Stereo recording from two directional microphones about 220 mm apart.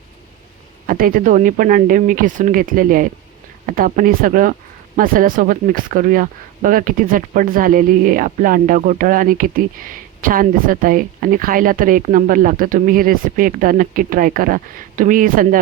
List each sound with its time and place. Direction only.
0.9 s speech: 40° right (ahead or behind)